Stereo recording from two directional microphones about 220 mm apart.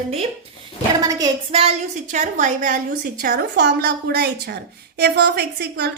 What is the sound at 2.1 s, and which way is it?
A woman's voice, 35° right (ahead or behind).